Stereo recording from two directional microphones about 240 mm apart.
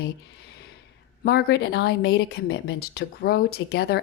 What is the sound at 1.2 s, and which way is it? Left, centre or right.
Speech, left.